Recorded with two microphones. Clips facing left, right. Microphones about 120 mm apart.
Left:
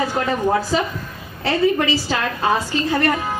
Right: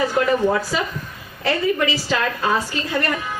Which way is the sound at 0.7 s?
30° left (ahead or behind).